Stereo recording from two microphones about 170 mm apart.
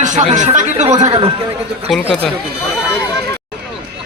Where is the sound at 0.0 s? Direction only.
45° right (ahead or behind).